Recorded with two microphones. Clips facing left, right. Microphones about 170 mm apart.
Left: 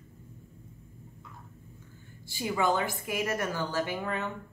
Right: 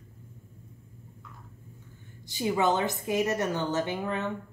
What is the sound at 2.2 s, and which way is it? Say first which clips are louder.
A woman's voice: right 3 dB; 20° right (ahead or behind).